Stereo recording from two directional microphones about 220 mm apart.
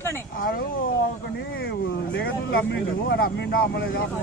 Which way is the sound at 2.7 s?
45° left (ahead or behind).